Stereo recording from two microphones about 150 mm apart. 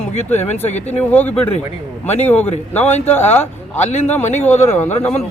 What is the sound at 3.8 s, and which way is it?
Speech, 50° left (ahead or behind).